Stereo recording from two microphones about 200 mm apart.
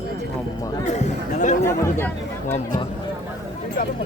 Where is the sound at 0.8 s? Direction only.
35° left (ahead or behind).